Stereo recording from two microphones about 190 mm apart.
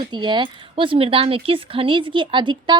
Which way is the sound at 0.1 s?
25° right (ahead or behind).